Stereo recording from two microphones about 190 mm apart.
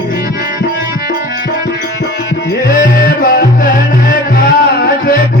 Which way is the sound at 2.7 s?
50° left (ahead or behind).